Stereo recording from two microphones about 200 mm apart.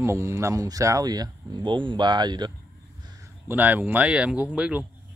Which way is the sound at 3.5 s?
10° right (ahead or behind).